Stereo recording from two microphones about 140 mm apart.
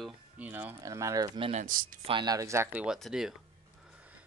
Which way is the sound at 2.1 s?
30° right (ahead or behind).